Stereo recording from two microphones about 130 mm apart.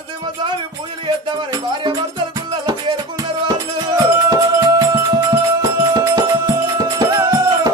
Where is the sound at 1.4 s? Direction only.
35° right (ahead or behind).